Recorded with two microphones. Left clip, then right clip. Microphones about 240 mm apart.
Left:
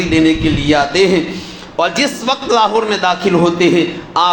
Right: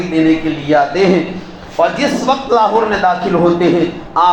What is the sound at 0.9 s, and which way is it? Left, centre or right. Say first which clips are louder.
A man's voice: even; left.